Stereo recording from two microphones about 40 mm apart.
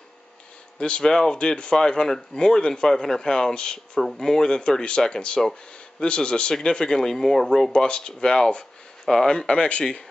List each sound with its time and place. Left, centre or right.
0.7 s speech: left